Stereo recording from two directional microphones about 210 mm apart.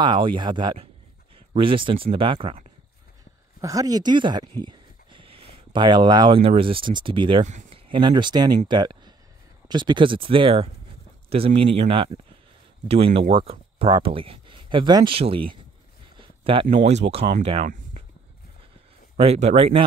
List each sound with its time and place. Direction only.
0.0 s speech: 25° right (ahead or behind)
3.6 s speech: 15° right (ahead or behind)
7.4 s speech: 35° right (ahead or behind)
7.9 s speech: 20° right (ahead or behind)
16.2 s a sound: 25° right (ahead or behind)
16.7 s speech: 30° right (ahead or behind)
19.1 s speech: 30° right (ahead or behind)